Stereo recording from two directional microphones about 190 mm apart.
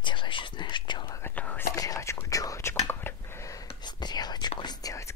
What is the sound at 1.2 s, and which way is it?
Whispering, 10° left (ahead or behind).